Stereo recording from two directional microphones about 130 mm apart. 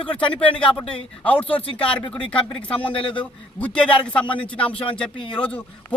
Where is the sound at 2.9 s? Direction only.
40° left (ahead or behind).